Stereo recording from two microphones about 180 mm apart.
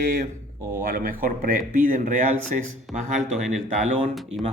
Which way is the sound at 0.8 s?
50° right (ahead or behind).